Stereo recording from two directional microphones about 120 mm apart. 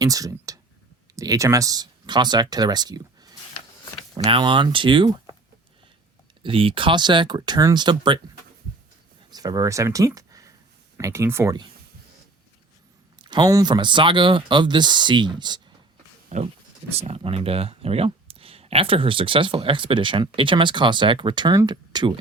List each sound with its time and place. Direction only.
0.0 s speech: 30° right (ahead or behind)
4.2 s speech: 45° right (ahead or behind)
6.4 s speech: 45° right (ahead or behind)
9.3 s speech: 30° right (ahead or behind)
13.2 s a sound: 40° right (ahead or behind)
13.5 s speech: 35° right (ahead or behind)
16.3 s speech: 70° right (ahead or behind)
16.9 s speech: 55° right (ahead or behind); by 22.2 s 40° right (ahead or behind)